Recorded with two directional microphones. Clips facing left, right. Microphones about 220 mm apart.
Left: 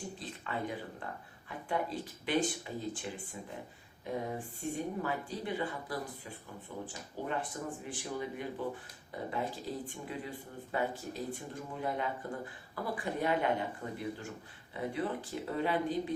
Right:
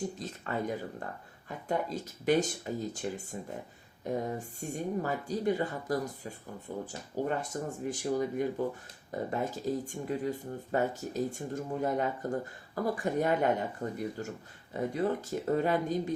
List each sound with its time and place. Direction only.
0.2 s speech: 45° right (ahead or behind)
14.7 s speech: 45° right (ahead or behind)